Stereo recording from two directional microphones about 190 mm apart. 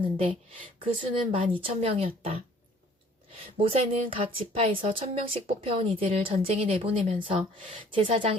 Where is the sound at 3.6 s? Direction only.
30° right (ahead or behind).